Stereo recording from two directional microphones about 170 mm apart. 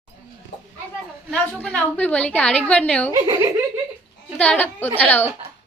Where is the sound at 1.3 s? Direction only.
5° left (ahead or behind).